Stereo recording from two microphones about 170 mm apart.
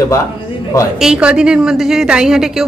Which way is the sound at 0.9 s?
5° right (ahead or behind).